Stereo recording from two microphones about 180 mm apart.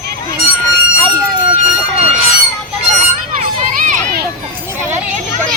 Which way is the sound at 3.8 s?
55° right (ahead or behind).